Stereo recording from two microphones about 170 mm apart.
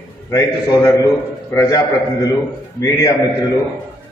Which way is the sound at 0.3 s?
20° left (ahead or behind).